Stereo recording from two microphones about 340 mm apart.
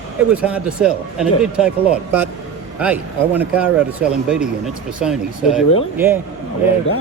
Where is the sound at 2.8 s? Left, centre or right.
Centre.